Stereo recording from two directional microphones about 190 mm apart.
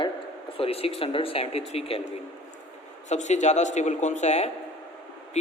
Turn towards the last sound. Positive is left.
turn(degrees=35)  # may be behind; listen again after turning